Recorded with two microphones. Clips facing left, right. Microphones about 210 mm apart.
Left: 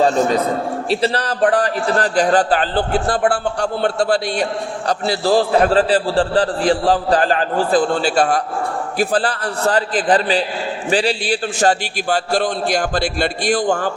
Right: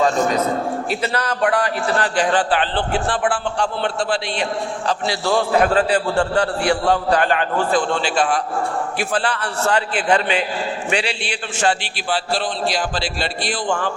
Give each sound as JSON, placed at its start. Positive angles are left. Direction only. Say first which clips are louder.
{"t": 0.9, "sound": "a man's voice", "louder": "left 4 dB", "side_deg": 35}